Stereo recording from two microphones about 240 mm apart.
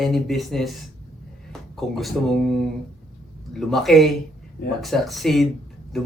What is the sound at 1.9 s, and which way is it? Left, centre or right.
Speech, centre.